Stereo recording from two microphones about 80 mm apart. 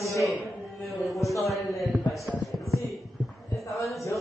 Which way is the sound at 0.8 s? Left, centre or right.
Centre.